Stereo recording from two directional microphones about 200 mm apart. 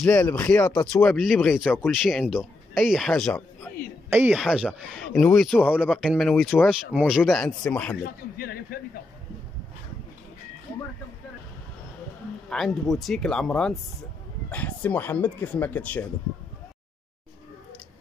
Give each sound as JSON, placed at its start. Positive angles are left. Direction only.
{"t": 0.0, "sound": "speech", "side_deg": 10}
{"t": 1.0, "sound": "a man's voice", "side_deg": 0}
{"t": 8.0, "sound": "a man's voice", "side_deg": 50}
{"t": 12.4, "sound": "a man's voice", "side_deg": 0}